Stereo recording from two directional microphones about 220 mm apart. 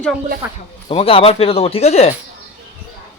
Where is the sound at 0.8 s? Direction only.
25° left (ahead or behind).